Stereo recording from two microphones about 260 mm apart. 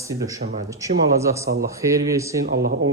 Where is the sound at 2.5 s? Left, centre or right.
Right.